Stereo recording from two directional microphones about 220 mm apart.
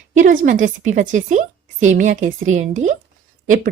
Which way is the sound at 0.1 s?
35° right (ahead or behind).